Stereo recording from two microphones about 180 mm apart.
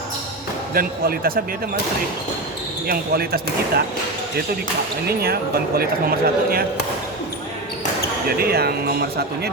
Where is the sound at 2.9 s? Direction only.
60° right (ahead or behind).